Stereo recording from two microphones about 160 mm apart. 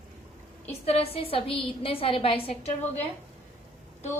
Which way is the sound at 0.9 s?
40° left (ahead or behind).